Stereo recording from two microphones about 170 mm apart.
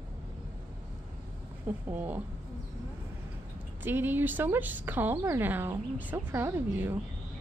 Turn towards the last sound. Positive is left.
turn(degrees=-15)  # may be behind; listen again after turning